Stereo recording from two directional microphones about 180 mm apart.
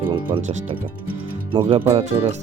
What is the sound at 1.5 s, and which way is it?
Speech, 30° right (ahead or behind).